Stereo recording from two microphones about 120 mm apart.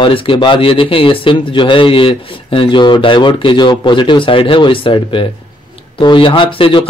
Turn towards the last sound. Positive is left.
turn(degrees=45)  # may be behind; listen again after turning